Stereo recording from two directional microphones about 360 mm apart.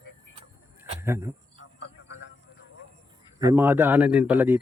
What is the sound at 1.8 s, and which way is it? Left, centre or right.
Vehicle, left.